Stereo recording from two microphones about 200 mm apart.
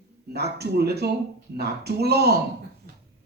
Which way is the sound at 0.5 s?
55° right (ahead or behind).